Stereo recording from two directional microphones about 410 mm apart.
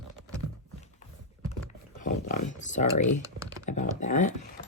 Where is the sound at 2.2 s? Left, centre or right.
Centre.